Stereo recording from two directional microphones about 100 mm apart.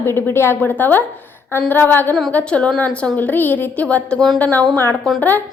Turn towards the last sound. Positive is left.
turn(degrees=15)  # may be behind; listen again after turning